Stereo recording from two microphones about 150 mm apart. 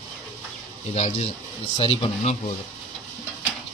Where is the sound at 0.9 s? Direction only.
45° left (ahead or behind).